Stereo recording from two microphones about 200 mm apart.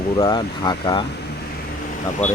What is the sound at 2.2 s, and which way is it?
Speech, 35° left (ahead or behind).